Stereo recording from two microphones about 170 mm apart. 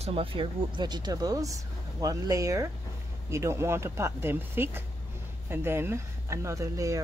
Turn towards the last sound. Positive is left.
turn(degrees=-20)  # may be behind; listen again after turning